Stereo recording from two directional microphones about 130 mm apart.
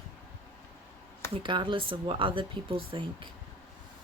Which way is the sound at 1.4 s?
40° right (ahead or behind).